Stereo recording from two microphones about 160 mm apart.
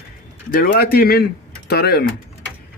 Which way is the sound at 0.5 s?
65° left (ahead or behind).